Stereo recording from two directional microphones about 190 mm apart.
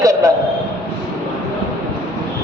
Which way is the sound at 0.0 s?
15° right (ahead or behind).